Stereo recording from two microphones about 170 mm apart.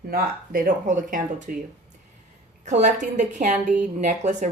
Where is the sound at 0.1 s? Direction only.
60° right (ahead or behind).